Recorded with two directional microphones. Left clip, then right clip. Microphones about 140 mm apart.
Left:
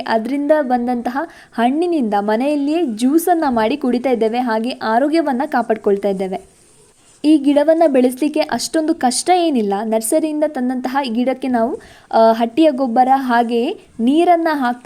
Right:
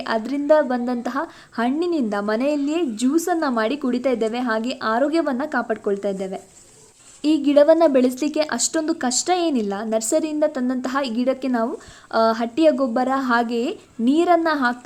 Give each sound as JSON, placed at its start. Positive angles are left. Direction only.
{"t": 0.0, "sound": "a woman's voice", "side_deg": 25}